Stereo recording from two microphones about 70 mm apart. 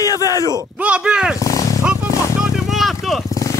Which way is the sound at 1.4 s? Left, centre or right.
Left.